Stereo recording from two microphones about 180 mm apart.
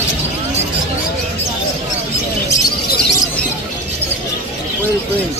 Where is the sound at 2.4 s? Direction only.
20° left (ahead or behind).